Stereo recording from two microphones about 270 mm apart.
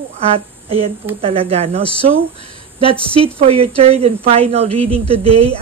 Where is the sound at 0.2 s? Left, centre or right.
Right.